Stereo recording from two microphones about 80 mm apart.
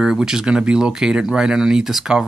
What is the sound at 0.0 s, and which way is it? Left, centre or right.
Speech, centre.